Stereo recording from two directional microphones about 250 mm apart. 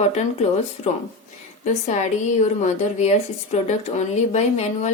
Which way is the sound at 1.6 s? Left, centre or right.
Left.